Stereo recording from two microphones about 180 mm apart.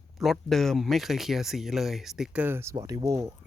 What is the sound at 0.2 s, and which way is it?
Speech, centre (ahead or behind).